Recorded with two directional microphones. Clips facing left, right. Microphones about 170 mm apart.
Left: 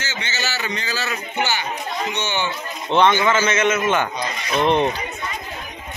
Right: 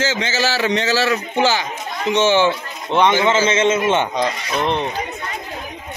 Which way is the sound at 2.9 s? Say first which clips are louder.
Even; 10° right (ahead or behind).